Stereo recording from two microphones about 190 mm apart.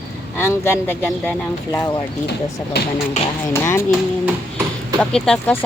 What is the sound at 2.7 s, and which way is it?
Speech, 60° left (ahead or behind).